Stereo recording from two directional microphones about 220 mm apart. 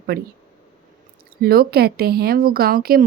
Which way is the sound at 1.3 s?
45° right (ahead or behind).